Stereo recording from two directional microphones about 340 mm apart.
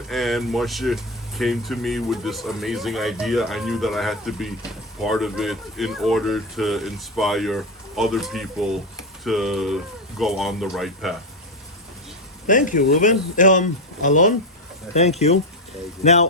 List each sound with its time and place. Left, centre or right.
0.1 s speech: centre
12.5 s speech: left
16.0 s speech: centre